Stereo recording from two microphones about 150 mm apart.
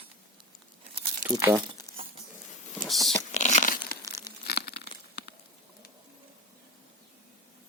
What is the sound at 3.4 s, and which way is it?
Tearing, 55° left (ahead or behind).